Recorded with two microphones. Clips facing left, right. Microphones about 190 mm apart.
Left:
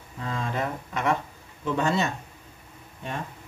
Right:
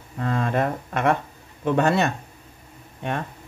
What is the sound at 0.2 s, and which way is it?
Speech, 60° right (ahead or behind).